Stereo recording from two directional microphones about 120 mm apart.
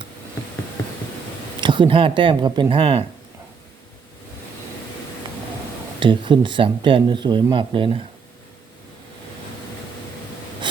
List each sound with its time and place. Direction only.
1.6 s speech: 45° right (ahead or behind)
6.0 s speech: 40° right (ahead or behind)